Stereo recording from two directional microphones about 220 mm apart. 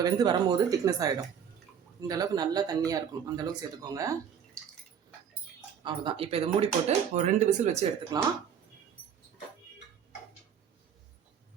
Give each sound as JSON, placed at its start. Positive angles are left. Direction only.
{"t": 0.0, "sound": "speech", "side_deg": -20}
{"t": 5.8, "sound": "speech", "side_deg": -20}
{"t": 8.1, "sound": "speech", "side_deg": -15}